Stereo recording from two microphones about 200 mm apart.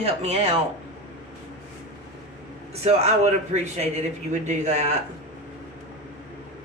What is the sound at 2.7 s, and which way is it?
Speech, 30° right (ahead or behind).